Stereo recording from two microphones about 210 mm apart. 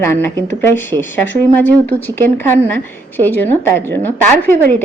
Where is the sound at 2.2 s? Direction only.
10° left (ahead or behind).